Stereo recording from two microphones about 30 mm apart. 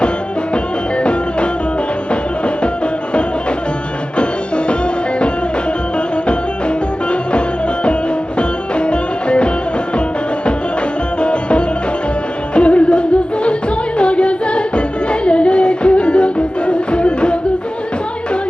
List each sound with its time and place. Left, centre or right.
0.5 s music: left
4.2 s music: left
6.2 s music: left
11.2 s music: left